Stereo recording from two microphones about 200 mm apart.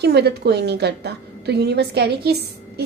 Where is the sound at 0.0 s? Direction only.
55° right (ahead or behind).